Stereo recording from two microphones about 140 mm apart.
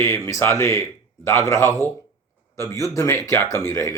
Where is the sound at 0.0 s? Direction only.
20° left (ahead or behind).